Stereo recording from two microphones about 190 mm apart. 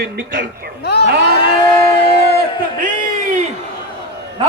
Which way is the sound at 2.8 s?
40° right (ahead or behind).